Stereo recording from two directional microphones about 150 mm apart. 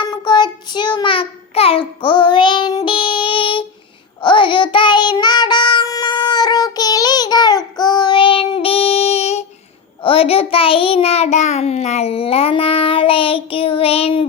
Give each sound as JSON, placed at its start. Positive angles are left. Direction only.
{"t": 0.0, "sound": "child singing", "side_deg": 30}